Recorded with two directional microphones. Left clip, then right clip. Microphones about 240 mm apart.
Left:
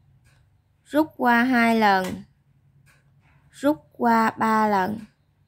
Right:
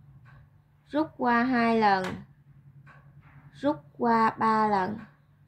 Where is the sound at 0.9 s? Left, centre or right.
Left.